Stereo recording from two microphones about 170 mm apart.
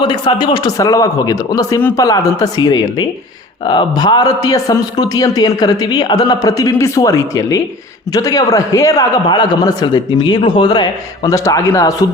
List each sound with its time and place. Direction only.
0.0 s a man's voice: 25° left (ahead or behind)